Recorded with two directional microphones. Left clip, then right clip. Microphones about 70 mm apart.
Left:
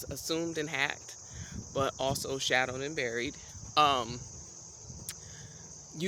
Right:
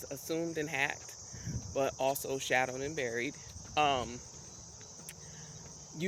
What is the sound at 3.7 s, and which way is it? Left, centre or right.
Speech, left.